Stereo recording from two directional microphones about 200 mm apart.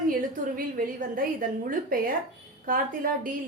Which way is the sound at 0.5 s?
45° right (ahead or behind).